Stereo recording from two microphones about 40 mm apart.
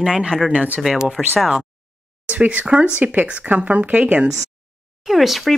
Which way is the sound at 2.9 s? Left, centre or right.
Right.